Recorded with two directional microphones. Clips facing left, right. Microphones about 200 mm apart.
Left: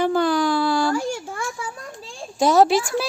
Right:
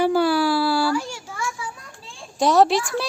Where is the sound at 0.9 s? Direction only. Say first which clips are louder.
Left 2 dB; 50° left (ahead or behind).